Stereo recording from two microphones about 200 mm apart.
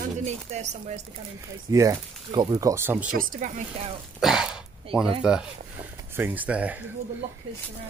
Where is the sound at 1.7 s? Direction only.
15° right (ahead or behind).